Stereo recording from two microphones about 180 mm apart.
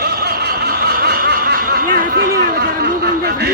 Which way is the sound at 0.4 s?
60° right (ahead or behind).